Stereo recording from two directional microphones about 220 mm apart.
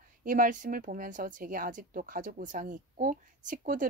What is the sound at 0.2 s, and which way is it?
Speech, 40° right (ahead or behind).